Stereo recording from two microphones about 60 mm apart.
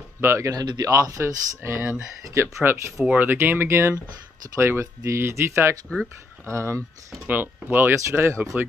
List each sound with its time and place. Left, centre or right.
0.2 s speech: right
0.5 s speech: right
3.3 s speech: right
7.2 s speech: right